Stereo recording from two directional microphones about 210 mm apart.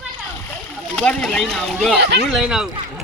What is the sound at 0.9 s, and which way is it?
Speech, centre (ahead or behind).